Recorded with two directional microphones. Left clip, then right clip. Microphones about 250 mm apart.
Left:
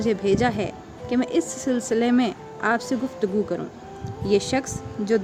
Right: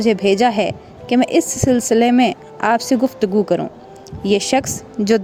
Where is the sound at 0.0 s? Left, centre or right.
Right.